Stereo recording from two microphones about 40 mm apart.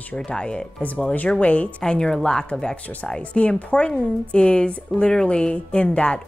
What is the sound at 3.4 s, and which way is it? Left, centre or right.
Speech, left.